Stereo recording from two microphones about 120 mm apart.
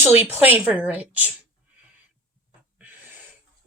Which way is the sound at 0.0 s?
15° right (ahead or behind).